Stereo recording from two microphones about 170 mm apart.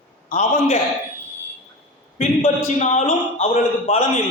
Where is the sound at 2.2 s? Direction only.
40° left (ahead or behind).